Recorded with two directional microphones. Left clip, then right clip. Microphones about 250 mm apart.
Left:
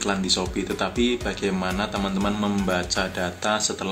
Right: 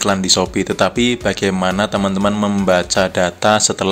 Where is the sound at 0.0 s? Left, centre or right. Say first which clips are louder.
Right 9 dB; right.